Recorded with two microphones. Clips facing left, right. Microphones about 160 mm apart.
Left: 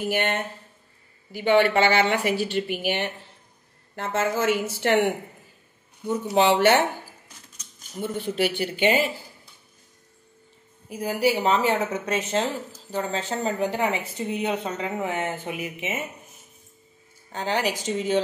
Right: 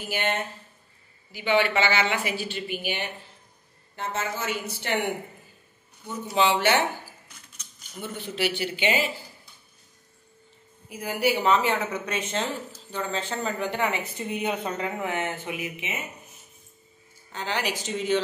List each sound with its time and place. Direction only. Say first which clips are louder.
0.1 s speech: right 2 dB; 55° left (ahead or behind)
2.3 s speech: left 6 dB; 70° left (ahead or behind)
6.3 s speech: left 4 dB; 55° left (ahead or behind)
7.9 s speech: left 6 dB; 45° left (ahead or behind)
10.9 s a woman's voice: left 3 dB; 35° left (ahead or behind)
17.3 s speech: left 4 dB; 45° left (ahead or behind)